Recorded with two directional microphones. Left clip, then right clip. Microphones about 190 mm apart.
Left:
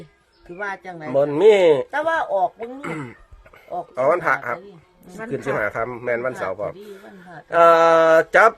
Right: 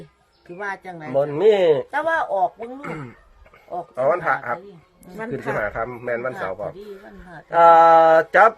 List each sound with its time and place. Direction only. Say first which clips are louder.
0.5 s a man's voice: left 1 dB; 10° left (ahead or behind)
1.1 s speech: left 3 dB; 30° left (ahead or behind)
1.9 s a man's voice: even; 10° left (ahead or behind)
2.6 s speech: left 2 dB; 35° left (ahead or behind)